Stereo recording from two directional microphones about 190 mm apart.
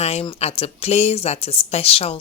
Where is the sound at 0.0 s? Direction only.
30° left (ahead or behind).